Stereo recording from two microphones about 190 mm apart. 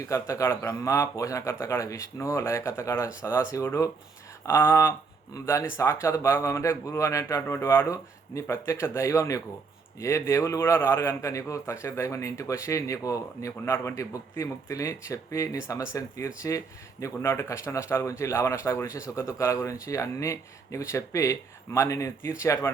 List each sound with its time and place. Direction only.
0.0 s speech: 15° left (ahead or behind)